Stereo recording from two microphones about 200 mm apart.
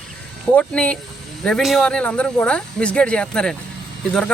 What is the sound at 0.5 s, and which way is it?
Speech, 5° left (ahead or behind).